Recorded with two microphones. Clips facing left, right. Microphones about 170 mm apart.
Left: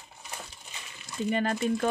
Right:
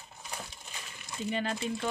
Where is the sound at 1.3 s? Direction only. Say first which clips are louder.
Left 6 dB; 50° left (ahead or behind).